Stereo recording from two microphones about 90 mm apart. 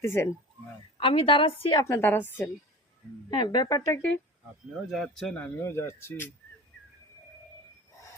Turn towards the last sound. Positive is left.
turn(degrees=25)  # may be behind; listen again after turning